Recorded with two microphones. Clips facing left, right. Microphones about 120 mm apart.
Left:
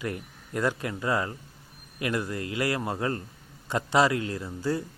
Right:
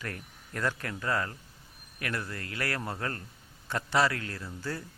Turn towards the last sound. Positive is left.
turn(degrees=15)  # may be behind; listen again after turning